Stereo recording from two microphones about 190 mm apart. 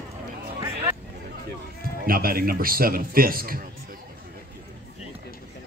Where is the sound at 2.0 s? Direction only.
50° right (ahead or behind).